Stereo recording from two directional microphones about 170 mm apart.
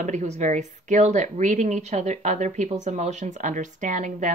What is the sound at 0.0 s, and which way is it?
Speech, 45° right (ahead or behind).